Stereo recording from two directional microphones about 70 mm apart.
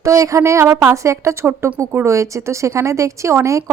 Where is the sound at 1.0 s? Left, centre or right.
Right.